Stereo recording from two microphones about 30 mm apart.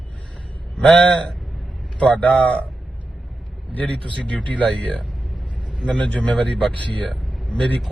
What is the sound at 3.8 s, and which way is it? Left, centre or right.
Speech, left.